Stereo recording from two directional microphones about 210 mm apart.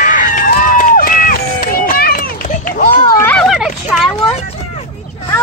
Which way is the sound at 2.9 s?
10° left (ahead or behind).